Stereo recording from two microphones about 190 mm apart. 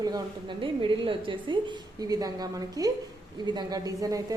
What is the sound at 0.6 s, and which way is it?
A woman's voice, 25° right (ahead or behind).